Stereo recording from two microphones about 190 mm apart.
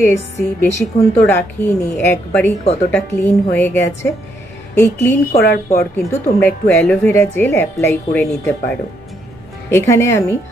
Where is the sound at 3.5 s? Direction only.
10° left (ahead or behind).